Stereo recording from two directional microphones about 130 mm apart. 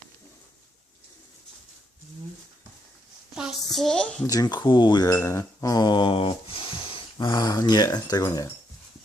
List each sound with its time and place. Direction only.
3.3 s a woman's voice: centre (ahead or behind)
4.3 s speech: 30° left (ahead or behind)